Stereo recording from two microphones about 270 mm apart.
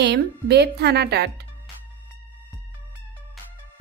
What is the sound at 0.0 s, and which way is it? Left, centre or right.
A woman's voice, right.